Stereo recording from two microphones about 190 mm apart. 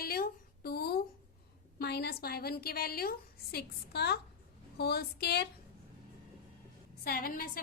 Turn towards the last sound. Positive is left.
turn(degrees=50)  # may be behind; listen again after turning